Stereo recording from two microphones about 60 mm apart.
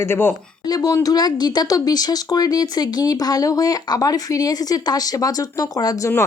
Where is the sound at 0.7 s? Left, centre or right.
Left.